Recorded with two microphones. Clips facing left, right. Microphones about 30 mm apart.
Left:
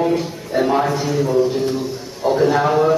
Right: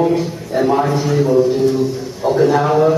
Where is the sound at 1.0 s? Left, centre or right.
Centre.